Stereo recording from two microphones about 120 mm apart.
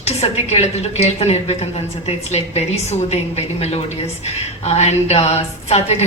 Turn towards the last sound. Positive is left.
turn(degrees=65)  # may be behind; listen again after turning